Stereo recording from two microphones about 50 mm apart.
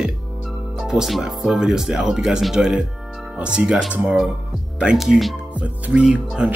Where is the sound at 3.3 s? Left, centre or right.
Centre.